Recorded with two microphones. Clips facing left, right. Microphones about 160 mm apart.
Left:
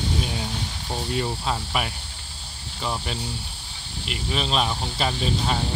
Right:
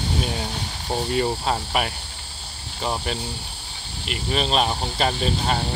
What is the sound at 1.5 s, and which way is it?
Speech, 50° right (ahead or behind).